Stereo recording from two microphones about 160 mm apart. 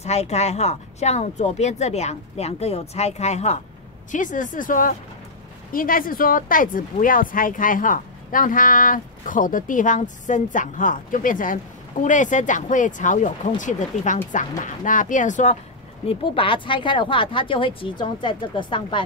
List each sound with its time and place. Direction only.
0.0 s speech: 45° left (ahead or behind)
16.1 s speech: 35° left (ahead or behind)